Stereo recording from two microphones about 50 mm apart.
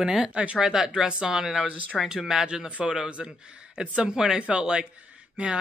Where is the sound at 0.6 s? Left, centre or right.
Centre.